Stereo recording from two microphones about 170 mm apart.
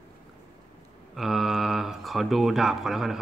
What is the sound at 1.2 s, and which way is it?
Speech, centre (ahead or behind).